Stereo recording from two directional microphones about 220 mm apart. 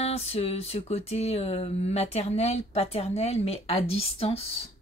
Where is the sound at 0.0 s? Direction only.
30° left (ahead or behind).